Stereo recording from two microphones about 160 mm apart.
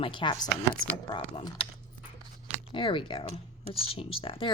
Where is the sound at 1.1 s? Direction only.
35° left (ahead or behind).